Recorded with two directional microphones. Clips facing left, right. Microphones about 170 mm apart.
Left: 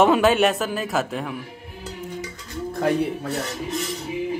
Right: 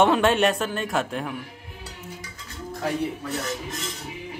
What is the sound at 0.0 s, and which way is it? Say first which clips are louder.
A man's voice: left 2 dB; centre (ahead or behind).